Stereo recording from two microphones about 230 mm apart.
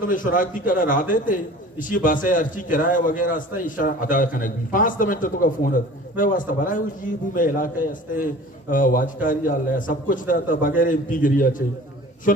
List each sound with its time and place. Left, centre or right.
0.1 s a man's voice: left